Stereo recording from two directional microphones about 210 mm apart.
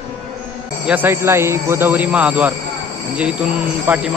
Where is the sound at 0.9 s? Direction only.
10° right (ahead or behind).